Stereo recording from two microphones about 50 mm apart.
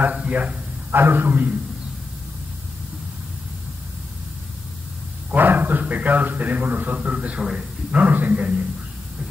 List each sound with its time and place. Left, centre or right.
0.0 s a man's voice: right
0.9 s speech: right
5.3 s a man's voice: right
7.1 s a man's voice: right
7.9 s speech: right